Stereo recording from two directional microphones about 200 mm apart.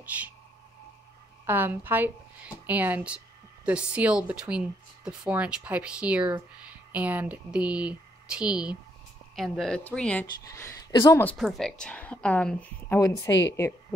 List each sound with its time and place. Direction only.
1.4 s speech: 10° right (ahead or behind); by 11.3 s 15° left (ahead or behind)
11.3 s a woman's voice: centre (ahead or behind)
13.3 s speech: 65° left (ahead or behind)